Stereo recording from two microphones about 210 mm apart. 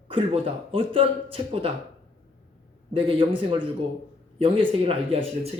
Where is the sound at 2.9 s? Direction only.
25° right (ahead or behind).